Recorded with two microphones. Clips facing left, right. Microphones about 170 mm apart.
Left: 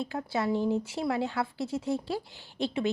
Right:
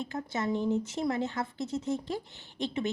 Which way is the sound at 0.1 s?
10° left (ahead or behind).